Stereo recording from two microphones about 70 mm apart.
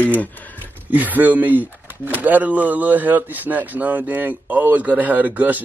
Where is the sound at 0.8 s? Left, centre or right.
Right.